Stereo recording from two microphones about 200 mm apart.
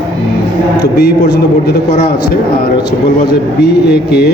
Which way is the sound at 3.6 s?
55° left (ahead or behind).